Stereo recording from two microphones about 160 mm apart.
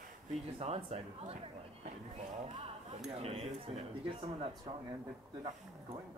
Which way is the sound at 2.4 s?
35° right (ahead or behind).